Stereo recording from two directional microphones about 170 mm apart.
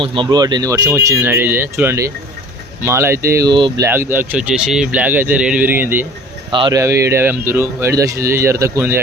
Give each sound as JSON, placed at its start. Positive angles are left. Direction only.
{"t": 0.0, "sound": "speech", "side_deg": -30}
{"t": 3.8, "sound": "speech", "side_deg": -15}
{"t": 6.5, "sound": "speech", "side_deg": -25}